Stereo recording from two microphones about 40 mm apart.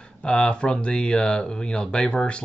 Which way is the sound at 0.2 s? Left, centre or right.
Left.